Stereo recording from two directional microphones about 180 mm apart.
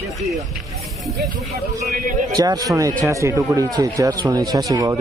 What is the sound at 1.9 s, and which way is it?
Speech, 50° right (ahead or behind).